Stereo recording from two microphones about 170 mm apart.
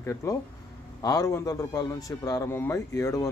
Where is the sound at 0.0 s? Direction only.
15° left (ahead or behind).